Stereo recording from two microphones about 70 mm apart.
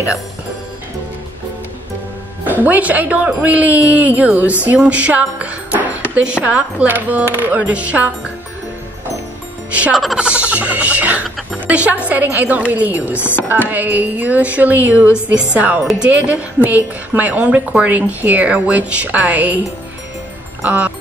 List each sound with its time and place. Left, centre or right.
2.4 s a woman's voice: right
9.7 s music: centre
10.1 s a woman's voice: centre
13.2 s speech: left
13.5 s a woman's voice: right
20.6 s a woman's voice: right